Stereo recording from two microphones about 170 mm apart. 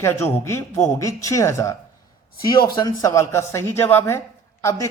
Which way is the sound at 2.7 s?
20° left (ahead or behind).